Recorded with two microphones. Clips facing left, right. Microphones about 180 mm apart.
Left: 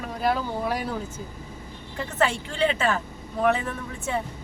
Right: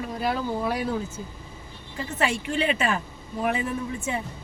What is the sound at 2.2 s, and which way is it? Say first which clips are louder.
A woman's voice: left 2 dB; 15° right (ahead or behind).